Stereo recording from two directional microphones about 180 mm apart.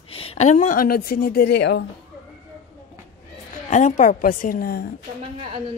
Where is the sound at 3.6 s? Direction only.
40° left (ahead or behind).